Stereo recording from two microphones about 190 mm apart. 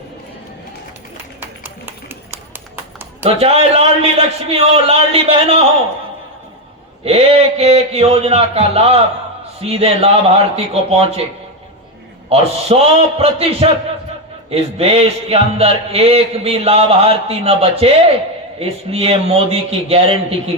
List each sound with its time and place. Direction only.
1.4 s run: 10° right (ahead or behind)
3.2 s speech: 30° right (ahead or behind)
7.0 s speech: 30° right (ahead or behind)
12.3 s speech: 30° right (ahead or behind)